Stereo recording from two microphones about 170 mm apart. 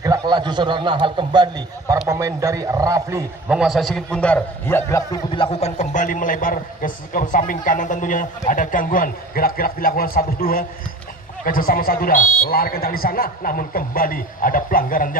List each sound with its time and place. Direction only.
0.0 s a man's voice: 25° right (ahead or behind)
3.4 s a man's voice: 5° right (ahead or behind); by 5.2 s 15° left (ahead or behind)
5.3 s a man's voice: 35° left (ahead or behind); by 15.1 s 55° left (ahead or behind)